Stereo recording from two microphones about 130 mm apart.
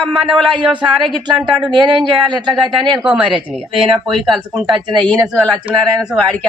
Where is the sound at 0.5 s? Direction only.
40° right (ahead or behind).